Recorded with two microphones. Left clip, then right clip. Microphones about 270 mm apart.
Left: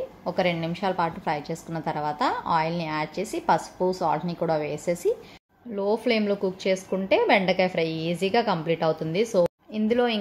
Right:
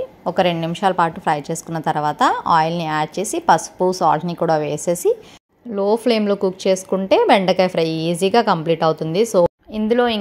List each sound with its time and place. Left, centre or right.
0.2 s a woman's voice: right